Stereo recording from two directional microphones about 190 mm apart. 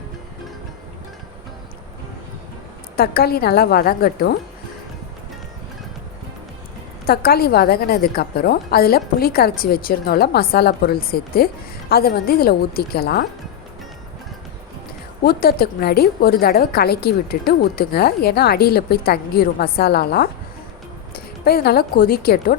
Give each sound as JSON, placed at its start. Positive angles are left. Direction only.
{"t": 2.9, "sound": "a woman's voice", "side_deg": 55}
{"t": 7.0, "sound": "a woman's voice", "side_deg": 55}
{"t": 15.2, "sound": "a woman's voice", "side_deg": 50}